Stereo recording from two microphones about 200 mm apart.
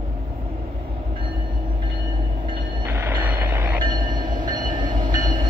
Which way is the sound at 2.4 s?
25° right (ahead or behind).